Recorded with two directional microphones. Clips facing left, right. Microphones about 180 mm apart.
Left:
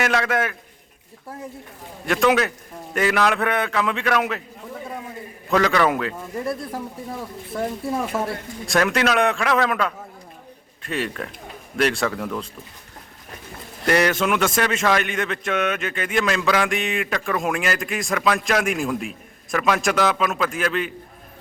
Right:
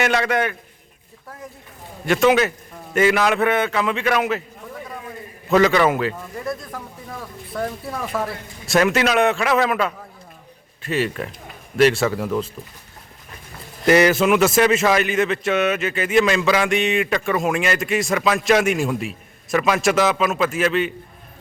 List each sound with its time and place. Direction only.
0.0 s a man's voice: centre (ahead or behind)
2.0 s a man's voice: centre (ahead or behind)
5.5 s a man's voice: 5° right (ahead or behind)
6.4 s speech: 30° left (ahead or behind)
8.6 s a man's voice: 5° right (ahead or behind)
13.8 s a man's voice: 5° right (ahead or behind)